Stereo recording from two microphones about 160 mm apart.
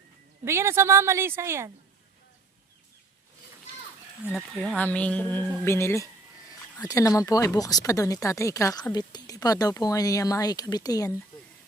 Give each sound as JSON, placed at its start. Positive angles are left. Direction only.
{"t": 0.4, "sound": "speech", "side_deg": -15}
{"t": 4.4, "sound": "a woman's voice", "side_deg": 0}